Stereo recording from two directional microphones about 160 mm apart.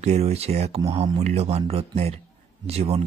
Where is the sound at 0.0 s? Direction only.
45° right (ahead or behind).